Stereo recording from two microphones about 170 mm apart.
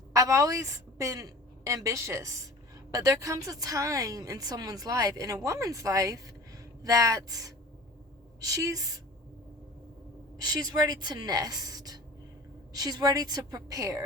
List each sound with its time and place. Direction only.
0.1 s a woman's voice: 20° right (ahead or behind)
10.3 s a woman's voice: 25° right (ahead or behind)